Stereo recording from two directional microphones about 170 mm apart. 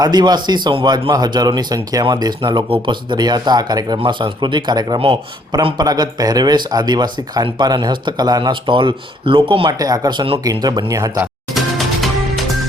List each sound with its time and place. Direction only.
0.0 s speech: 25° right (ahead or behind)